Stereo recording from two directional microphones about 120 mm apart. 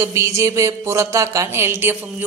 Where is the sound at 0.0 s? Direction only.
25° right (ahead or behind).